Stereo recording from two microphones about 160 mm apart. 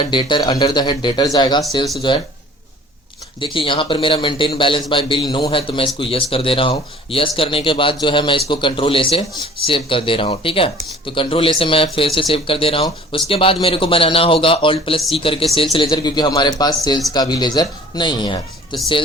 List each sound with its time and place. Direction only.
0.0 s speech: 30° left (ahead or behind)
3.4 s speech: 30° left (ahead or behind)